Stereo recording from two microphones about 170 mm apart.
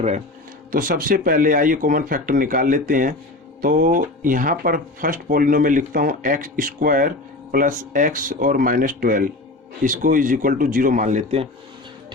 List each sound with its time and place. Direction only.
0.7 s speech: 55° right (ahead or behind); by 11.4 s 40° right (ahead or behind)